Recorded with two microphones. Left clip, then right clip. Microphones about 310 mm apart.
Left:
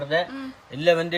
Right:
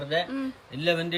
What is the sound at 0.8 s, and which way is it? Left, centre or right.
Speech, left.